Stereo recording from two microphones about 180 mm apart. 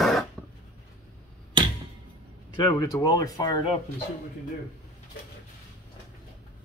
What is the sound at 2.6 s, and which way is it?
Speech, 20° left (ahead or behind).